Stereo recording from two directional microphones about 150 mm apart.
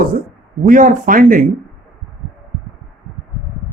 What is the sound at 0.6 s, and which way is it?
Speech, 60° right (ahead or behind).